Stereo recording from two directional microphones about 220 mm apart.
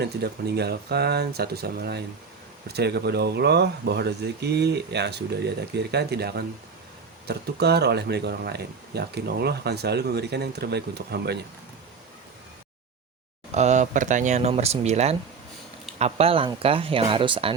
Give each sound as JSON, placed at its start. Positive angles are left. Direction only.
{"t": 0.0, "sound": "speech", "side_deg": -50}
{"t": 13.5, "sound": "speech", "side_deg": -30}